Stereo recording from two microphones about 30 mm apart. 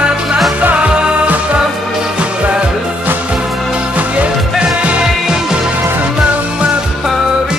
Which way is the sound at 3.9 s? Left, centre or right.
Right.